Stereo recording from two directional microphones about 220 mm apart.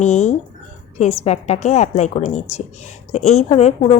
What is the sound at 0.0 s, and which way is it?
Speech, 30° left (ahead or behind).